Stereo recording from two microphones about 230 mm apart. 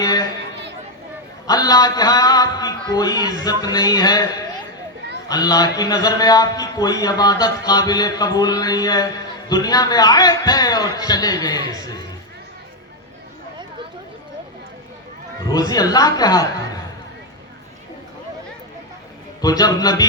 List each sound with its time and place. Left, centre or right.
0.0 s chatter: centre
1.5 s a man's voice: centre
5.3 s a man's voice: centre
15.4 s speech: centre
19.4 s a man's voice: centre